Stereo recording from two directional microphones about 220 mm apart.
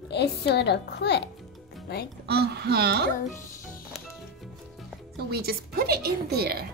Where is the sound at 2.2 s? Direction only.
50° right (ahead or behind).